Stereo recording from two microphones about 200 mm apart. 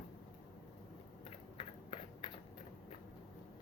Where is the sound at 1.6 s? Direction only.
25° left (ahead or behind).